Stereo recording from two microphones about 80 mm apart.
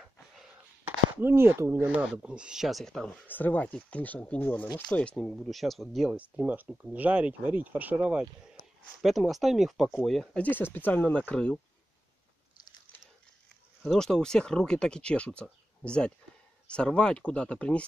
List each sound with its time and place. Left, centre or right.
0.0 s a sound: centre
1.1 s speech: right
2.2 s speech: centre
2.8 s speech: centre
3.3 s speech: left
5.5 s speech: centre
6.1 s speech: centre
9.0 s speech: centre
10.3 s speech: left
13.8 s speech: centre